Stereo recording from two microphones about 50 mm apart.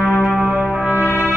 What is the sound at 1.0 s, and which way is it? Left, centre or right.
Music, left.